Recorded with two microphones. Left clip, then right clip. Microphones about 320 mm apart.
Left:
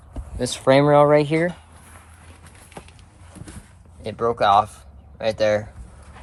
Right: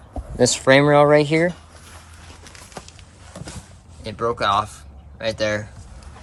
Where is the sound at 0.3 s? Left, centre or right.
Centre.